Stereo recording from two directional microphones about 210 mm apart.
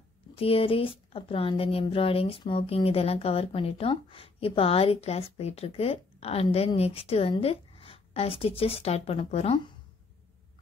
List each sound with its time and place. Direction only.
0.4 s a woman's voice: 25° left (ahead or behind)